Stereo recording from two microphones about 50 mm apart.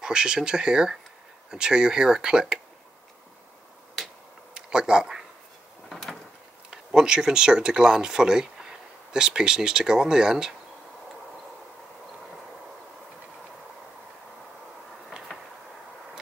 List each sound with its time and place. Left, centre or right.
0.0 s speech: centre
4.6 s a sound: centre
5.9 s door: centre
6.7 s speech: centre